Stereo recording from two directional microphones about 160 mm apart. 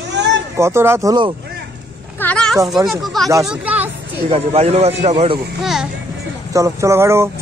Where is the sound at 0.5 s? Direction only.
15° right (ahead or behind).